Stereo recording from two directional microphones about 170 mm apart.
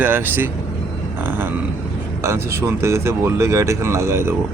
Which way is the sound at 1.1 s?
10° right (ahead or behind).